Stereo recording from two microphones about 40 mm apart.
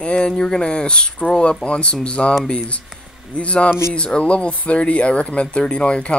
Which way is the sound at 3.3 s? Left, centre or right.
Left.